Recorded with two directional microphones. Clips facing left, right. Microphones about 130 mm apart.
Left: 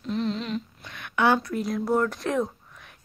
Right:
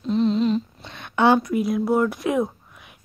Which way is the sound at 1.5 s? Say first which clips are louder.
Right 4 dB; 10° right (ahead or behind).